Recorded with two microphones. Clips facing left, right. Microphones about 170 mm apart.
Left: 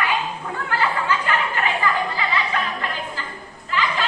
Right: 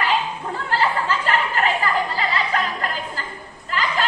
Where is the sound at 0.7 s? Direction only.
30° right (ahead or behind).